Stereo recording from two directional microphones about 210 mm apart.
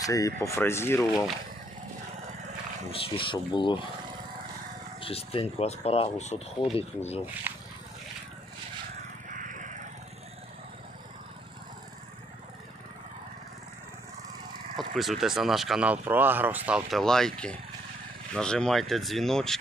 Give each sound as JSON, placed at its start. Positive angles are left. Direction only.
{"t": 0.0, "sound": "speech", "side_deg": 15}
{"t": 3.2, "sound": "speech", "side_deg": 20}
{"t": 4.9, "sound": "speech", "side_deg": 25}
{"t": 7.5, "sound": "speech", "side_deg": -10}
{"t": 9.4, "sound": "a sound", "side_deg": -40}
{"t": 14.8, "sound": "speech", "side_deg": 0}